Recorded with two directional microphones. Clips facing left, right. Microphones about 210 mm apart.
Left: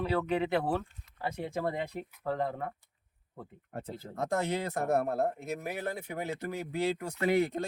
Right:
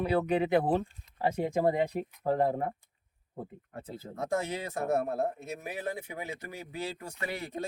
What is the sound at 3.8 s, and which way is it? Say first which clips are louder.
Speech: left 1 dB; 65° left (ahead or behind).